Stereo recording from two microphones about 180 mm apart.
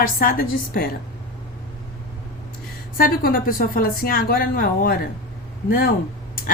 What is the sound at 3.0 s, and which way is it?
A woman's voice, 55° left (ahead or behind).